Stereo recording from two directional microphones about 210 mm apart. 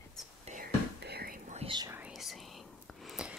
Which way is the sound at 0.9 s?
50° right (ahead or behind).